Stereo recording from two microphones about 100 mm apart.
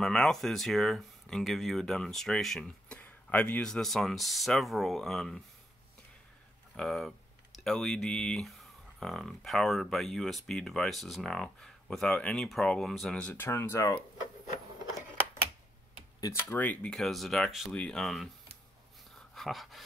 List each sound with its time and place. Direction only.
0.0 s speech: 5° left (ahead or behind)
6.8 s speech: centre (ahead or behind)
13.4 s speech: 25° left (ahead or behind)
16.3 s speech: 20° left (ahead or behind)
16.9 s speech: 5° left (ahead or behind)
17.7 s speech: 10° left (ahead or behind)
19.3 s dog: centre (ahead or behind)